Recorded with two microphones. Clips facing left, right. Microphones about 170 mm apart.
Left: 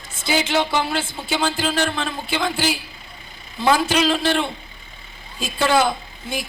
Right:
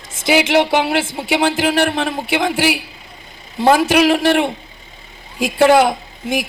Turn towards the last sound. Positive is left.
turn(degrees=-80)